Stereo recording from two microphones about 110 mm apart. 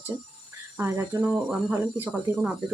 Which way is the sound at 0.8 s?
20° right (ahead or behind).